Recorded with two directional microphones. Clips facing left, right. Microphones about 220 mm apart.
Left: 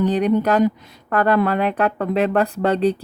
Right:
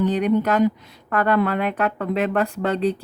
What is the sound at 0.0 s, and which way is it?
Speech, 35° left (ahead or behind).